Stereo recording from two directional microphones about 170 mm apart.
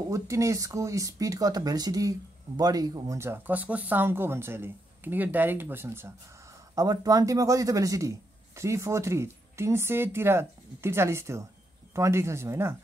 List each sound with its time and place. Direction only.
0.1 s speech: 20° right (ahead or behind)